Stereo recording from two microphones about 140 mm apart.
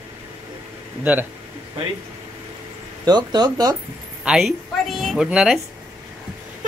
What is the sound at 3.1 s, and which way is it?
Speech, 30° right (ahead or behind).